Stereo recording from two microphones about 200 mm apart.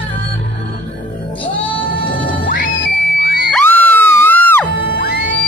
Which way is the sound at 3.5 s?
10° left (ahead or behind).